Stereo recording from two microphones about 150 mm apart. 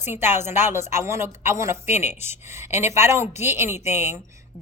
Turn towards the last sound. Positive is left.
turn(degrees=-20)  # may be behind; listen again after turning